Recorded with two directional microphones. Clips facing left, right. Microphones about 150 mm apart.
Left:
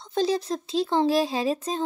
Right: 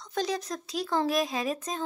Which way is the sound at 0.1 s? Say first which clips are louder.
Left 6 dB; 30° left (ahead or behind).